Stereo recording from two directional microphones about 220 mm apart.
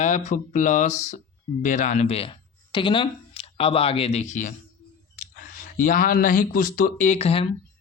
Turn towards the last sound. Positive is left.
turn(degrees=25)  # may be behind; listen again after turning